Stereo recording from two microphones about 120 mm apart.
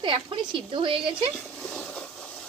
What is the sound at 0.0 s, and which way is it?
Speech, 45° right (ahead or behind).